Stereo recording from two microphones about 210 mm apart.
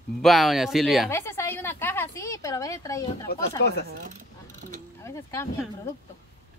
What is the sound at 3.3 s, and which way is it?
Speech, 50° left (ahead or behind).